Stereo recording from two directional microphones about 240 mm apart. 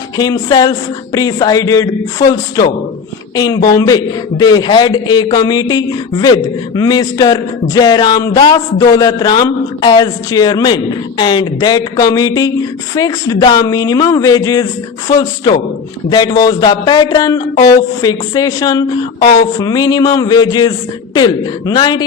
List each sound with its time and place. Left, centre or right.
0.2 s a man's voice: centre